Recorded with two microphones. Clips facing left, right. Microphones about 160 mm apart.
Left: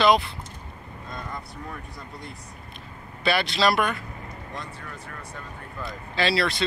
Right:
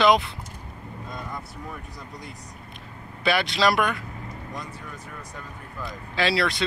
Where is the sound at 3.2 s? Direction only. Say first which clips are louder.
Even; 15° right (ahead or behind).